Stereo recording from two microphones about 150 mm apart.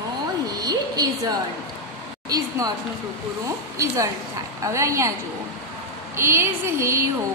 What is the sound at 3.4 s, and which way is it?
Speech, 20° right (ahead or behind).